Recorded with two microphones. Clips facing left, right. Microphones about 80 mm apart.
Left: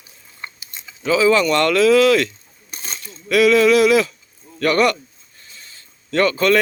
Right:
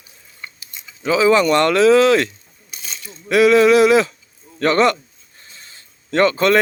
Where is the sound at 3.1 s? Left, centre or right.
Right.